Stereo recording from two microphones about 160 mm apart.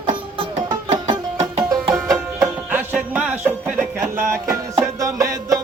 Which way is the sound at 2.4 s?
10° right (ahead or behind).